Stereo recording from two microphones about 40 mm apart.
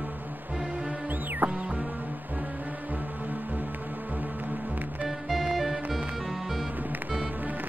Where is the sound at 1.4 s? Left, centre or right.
Right.